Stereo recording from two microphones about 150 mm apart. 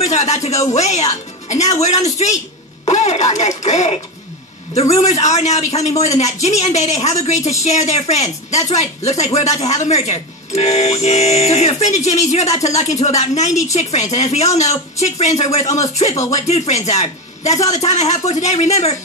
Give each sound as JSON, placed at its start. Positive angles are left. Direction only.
{"t": 0.0, "sound": "a man's voice", "side_deg": 50}